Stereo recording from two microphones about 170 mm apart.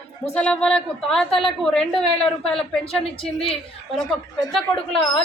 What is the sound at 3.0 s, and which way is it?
Speech, 35° left (ahead or behind).